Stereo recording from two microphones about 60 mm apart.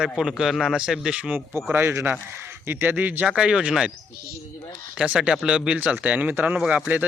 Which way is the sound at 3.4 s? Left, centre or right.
Centre.